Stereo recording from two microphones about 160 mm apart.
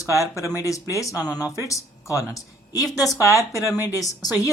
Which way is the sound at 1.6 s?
20° left (ahead or behind).